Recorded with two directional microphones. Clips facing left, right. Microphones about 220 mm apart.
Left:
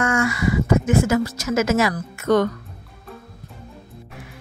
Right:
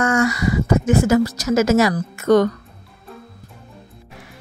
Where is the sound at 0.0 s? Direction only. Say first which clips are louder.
Right 3 dB; 40° right (ahead or behind).